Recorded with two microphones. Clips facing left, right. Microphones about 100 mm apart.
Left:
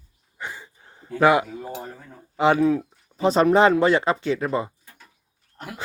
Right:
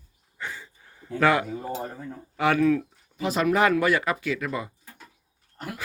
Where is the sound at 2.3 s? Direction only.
20° left (ahead or behind).